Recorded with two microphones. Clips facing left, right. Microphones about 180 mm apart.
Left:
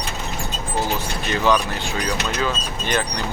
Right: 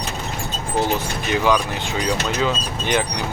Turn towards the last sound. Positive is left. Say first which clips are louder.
# right 2 dB
turn(degrees=-15)  # may be behind; listen again after turning